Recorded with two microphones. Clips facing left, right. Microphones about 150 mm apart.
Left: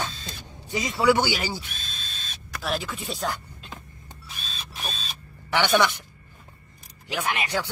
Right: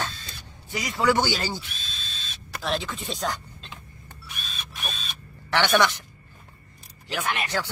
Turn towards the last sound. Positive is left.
turn(degrees=10)  # may be behind; listen again after turning